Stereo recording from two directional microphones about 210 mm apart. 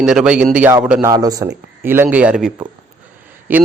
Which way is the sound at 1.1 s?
15° right (ahead or behind).